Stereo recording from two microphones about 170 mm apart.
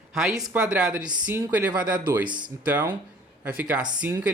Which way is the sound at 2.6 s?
10° right (ahead or behind).